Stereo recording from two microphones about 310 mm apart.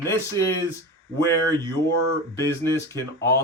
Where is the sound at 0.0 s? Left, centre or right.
Centre.